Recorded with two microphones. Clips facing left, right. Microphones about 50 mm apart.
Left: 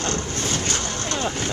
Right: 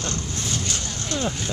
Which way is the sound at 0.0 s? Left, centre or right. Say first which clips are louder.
Left 4 dB; left.